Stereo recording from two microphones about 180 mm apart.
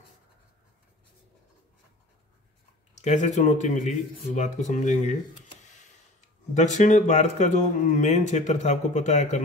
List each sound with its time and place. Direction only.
3.0 s speech: 40° left (ahead or behind)
6.5 s speech: 40° left (ahead or behind)